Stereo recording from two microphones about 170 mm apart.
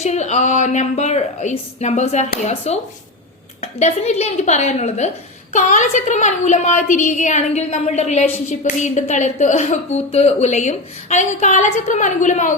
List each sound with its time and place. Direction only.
0.0 s a woman's voice: 40° left (ahead or behind)